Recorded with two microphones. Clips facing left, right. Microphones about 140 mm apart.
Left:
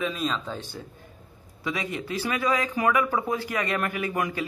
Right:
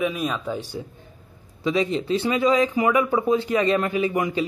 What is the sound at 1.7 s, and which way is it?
Speech, 25° right (ahead or behind).